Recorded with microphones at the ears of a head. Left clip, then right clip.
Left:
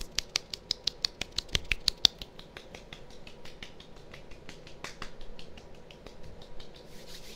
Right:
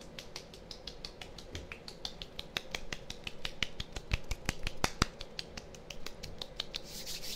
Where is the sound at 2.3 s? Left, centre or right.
Right.